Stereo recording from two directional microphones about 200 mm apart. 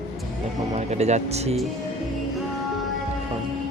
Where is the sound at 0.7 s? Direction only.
35° right (ahead or behind).